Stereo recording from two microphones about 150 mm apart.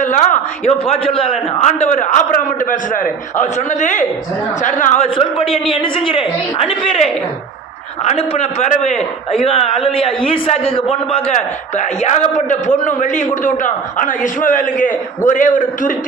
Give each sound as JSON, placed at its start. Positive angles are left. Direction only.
{"t": 0.0, "sound": "a man's voice", "side_deg": 55}
{"t": 0.9, "sound": "a man's voice", "side_deg": 40}
{"t": 1.6, "sound": "a man's voice", "side_deg": 50}
{"t": 5.0, "sound": "a man's voice", "side_deg": 35}
{"t": 8.0, "sound": "a man's voice", "side_deg": 45}